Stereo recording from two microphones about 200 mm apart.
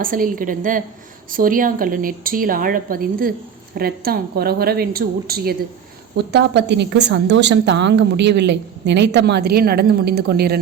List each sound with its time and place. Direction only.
0.0 s a woman's voice: 45° right (ahead or behind)